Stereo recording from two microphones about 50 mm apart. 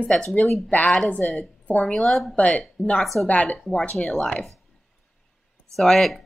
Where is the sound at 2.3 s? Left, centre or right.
Left.